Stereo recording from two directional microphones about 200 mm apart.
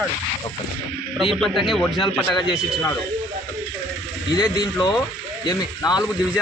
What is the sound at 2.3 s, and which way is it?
Speech, 20° left (ahead or behind).